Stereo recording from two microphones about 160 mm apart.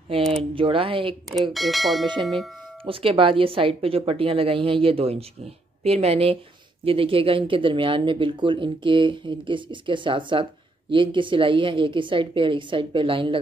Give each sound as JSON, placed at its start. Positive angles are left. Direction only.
{"t": 0.3, "sound": "speech", "side_deg": -35}
{"t": 1.5, "sound": "speech", "side_deg": 0}
{"t": 2.8, "sound": "speech", "side_deg": -35}